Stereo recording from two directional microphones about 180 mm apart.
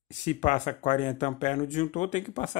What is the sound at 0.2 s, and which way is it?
Speech, 40° left (ahead or behind).